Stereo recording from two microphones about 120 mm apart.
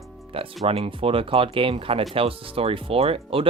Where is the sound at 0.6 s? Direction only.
50° right (ahead or behind).